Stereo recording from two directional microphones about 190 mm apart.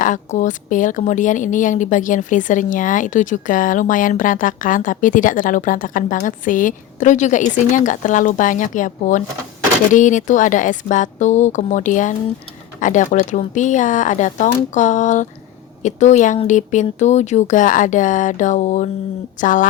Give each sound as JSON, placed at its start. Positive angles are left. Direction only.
{"t": 0.0, "sound": "a woman's voice", "side_deg": 40}